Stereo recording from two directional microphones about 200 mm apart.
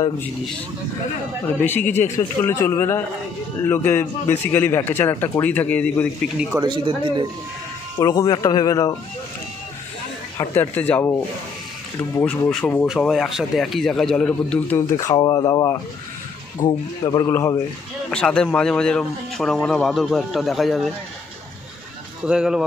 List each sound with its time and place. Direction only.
1.6 s a man's voice: 10° left (ahead or behind)
6.6 s speech: 25° right (ahead or behind)
8.0 s speech: 20° left (ahead or behind)
10.3 s a man's voice: 10° left (ahead or behind)
12.3 s a man's voice: 5° left (ahead or behind)
15.0 s a man's voice: 15° left (ahead or behind)
18.1 s a man's voice: 5° left (ahead or behind)
22.2 s a man's voice: 5° right (ahead or behind)